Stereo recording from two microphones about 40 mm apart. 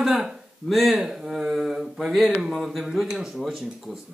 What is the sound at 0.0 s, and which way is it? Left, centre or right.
Speech, centre.